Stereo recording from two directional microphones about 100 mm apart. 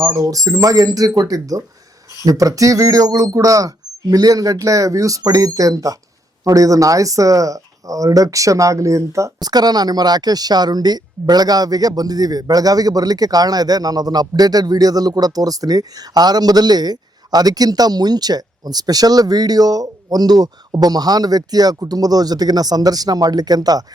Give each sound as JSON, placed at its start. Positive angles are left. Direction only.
{"t": 0.0, "sound": "speech", "side_deg": -35}